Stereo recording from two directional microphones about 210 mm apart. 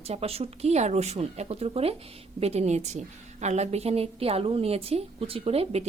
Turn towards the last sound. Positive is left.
turn(degrees=-30)  # may be behind; listen again after turning